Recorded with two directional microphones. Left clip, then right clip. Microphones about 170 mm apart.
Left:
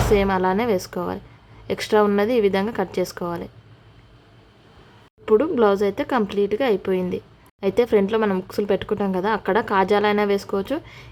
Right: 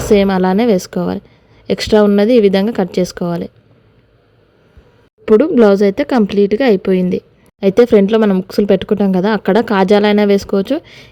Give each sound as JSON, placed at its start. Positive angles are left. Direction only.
{"t": 0.1, "sound": "speech", "side_deg": -35}
{"t": 5.2, "sound": "speech", "side_deg": -35}